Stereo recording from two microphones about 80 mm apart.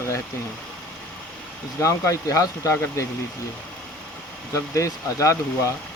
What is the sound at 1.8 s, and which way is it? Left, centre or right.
Speech, left.